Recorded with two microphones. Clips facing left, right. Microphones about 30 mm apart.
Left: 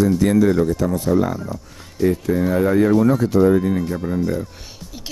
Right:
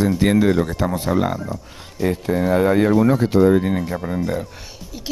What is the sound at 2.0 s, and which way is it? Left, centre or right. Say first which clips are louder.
Speech: left 1 dB; right.